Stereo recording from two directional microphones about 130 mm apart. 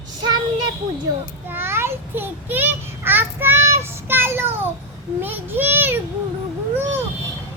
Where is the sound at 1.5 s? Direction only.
20° right (ahead or behind).